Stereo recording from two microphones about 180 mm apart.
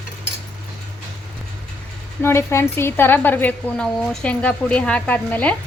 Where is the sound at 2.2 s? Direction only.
15° left (ahead or behind).